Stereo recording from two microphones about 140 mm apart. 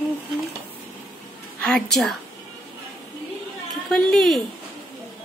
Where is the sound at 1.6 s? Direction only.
5° left (ahead or behind).